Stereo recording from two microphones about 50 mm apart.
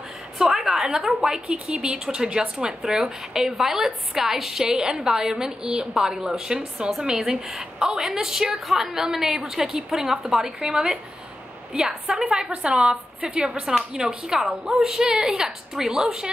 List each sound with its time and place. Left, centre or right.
0.4 s a woman's voice: centre